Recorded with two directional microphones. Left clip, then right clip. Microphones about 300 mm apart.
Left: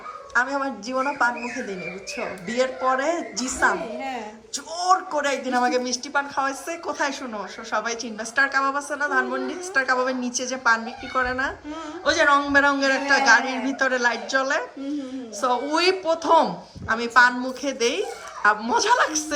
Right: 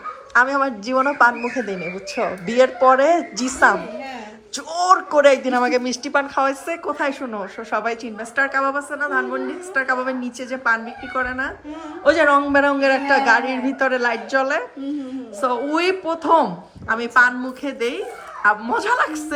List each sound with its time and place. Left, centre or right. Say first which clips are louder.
0.3 s a woman's voice: right 6 dB; centre